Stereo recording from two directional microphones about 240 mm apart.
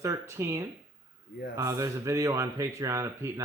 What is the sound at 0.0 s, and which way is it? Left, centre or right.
Speech, centre.